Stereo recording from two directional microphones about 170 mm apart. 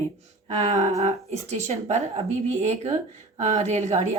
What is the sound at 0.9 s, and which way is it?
Speech, 40° right (ahead or behind).